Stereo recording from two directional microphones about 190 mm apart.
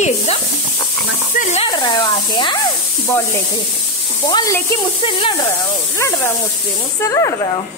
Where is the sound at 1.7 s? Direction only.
25° left (ahead or behind).